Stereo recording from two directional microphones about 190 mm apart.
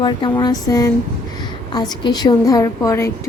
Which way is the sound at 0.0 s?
25° left (ahead or behind).